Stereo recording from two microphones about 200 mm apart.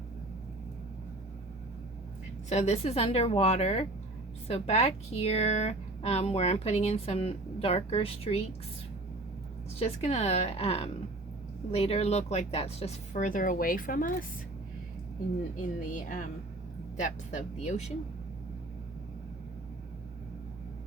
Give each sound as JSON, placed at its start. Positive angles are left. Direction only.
{"t": 2.5, "sound": "speech", "side_deg": 35}
{"t": 9.7, "sound": "speech", "side_deg": 30}
{"t": 15.5, "sound": "speech", "side_deg": 40}